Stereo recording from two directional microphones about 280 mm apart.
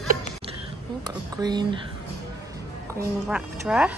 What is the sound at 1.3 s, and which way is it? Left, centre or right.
Speech, centre.